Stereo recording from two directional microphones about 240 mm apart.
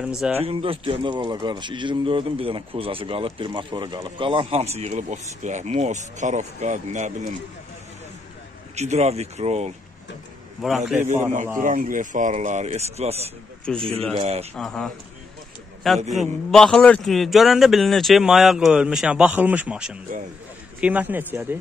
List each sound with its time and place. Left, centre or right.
0.0 s a man's voice: centre
0.5 s speech: right
8.7 s speech: right
11.6 s speech: right
14.5 s a man's voice: centre